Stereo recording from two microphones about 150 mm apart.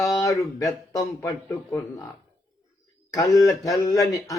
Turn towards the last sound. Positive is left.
turn(degrees=25)  # may be behind; listen again after turning